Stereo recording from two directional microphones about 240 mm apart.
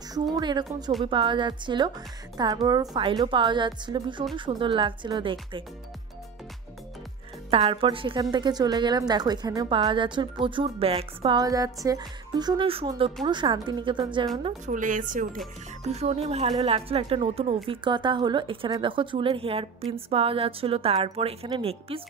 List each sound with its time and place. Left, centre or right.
0.1 s a woman's voice: centre
7.5 s a woman's voice: right
14.4 s a woman's voice: right